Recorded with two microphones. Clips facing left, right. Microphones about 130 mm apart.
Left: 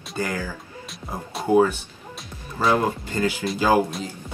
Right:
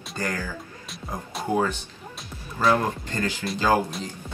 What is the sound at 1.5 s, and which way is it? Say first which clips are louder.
Speech: left 7 dB; 15° left (ahead or behind).